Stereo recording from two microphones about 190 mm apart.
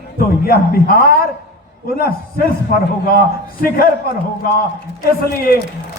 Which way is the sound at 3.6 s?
50° left (ahead or behind).